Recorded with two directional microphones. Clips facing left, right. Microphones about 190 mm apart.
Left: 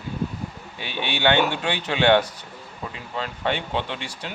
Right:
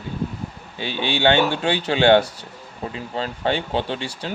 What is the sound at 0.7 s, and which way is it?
Speech, 30° right (ahead or behind).